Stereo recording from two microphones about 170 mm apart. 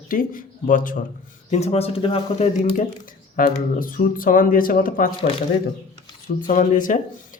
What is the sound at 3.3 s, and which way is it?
Speech, 55° left (ahead or behind).